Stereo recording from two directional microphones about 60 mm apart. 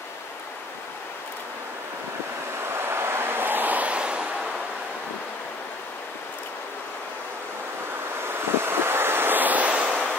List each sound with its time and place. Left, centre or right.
2.7 s waves: right; by 4.3 s centre
8.3 s waves: right